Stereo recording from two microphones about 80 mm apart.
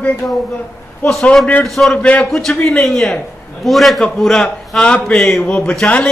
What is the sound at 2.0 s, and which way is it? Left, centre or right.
Speech, centre.